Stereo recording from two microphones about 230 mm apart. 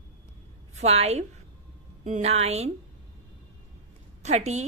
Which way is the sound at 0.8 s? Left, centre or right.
Right.